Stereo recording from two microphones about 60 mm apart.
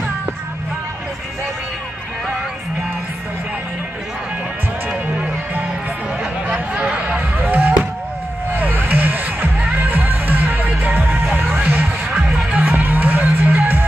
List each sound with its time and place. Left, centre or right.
6.4 s music: centre
11.8 s music: centre
12.5 s music: right